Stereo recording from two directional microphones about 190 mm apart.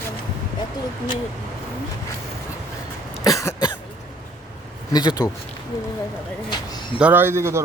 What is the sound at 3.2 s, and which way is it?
Cough, 15° left (ahead or behind).